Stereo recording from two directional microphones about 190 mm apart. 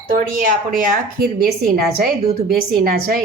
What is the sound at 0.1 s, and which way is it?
Speech, 45° right (ahead or behind).